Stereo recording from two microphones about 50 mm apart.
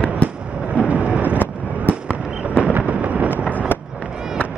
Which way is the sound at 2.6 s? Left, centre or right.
Right.